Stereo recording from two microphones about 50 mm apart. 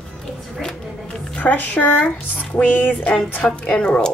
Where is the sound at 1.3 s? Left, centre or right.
Left.